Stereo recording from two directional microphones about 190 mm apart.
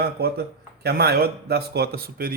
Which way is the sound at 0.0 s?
55° right (ahead or behind).